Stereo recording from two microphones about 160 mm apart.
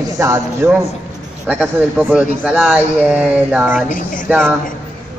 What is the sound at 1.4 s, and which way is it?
Speech, 10° right (ahead or behind).